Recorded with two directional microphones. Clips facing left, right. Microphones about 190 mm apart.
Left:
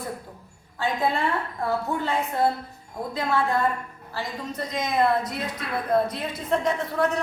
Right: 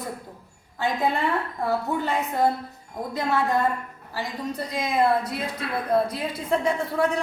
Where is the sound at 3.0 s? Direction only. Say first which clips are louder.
Even; 15° right (ahead or behind).